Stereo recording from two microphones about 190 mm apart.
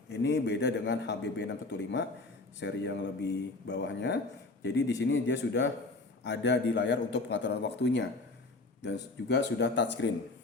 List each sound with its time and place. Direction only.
0.1 s a man's voice: 65° left (ahead or behind)